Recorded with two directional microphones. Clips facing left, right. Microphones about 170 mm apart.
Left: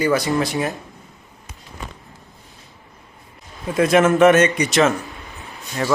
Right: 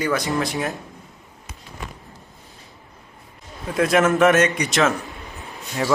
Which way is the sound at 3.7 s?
Centre (ahead or behind).